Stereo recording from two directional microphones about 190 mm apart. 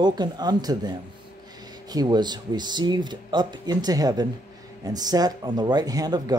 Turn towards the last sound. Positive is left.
turn(degrees=-20)  # may be behind; listen again after turning